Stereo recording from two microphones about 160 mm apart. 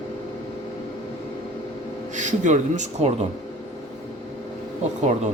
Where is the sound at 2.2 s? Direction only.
50° right (ahead or behind).